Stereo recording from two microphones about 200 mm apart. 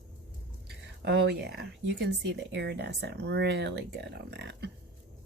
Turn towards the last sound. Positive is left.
turn(degrees=-60)  # may be behind; listen again after turning